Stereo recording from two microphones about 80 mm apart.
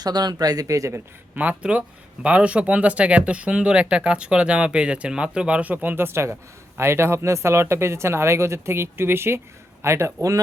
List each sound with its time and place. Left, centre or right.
0.0 s speech: right
1.4 s speech: centre; by 10.3 s right